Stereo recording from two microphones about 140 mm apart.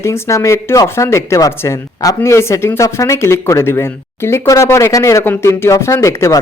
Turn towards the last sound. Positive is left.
turn(degrees=20)  # may be behind; listen again after turning